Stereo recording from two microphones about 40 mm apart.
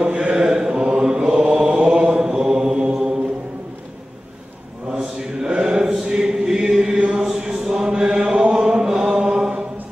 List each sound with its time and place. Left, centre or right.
0.0 s mantra: right
4.9 s chant: centre
8.5 s mantra: centre